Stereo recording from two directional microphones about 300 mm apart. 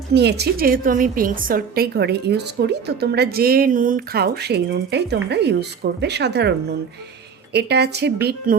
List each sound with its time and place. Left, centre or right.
0.1 s a woman's voice: right
7.5 s a woman's voice: right